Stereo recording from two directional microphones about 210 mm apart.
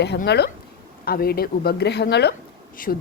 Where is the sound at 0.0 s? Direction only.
55° left (ahead or behind).